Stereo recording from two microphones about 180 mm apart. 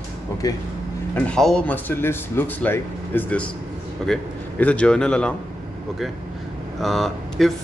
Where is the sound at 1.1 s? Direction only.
5° left (ahead or behind).